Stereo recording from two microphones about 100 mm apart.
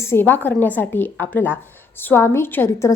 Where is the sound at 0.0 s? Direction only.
25° left (ahead or behind).